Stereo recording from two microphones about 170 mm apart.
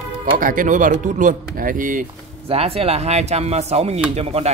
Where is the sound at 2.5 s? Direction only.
35° right (ahead or behind).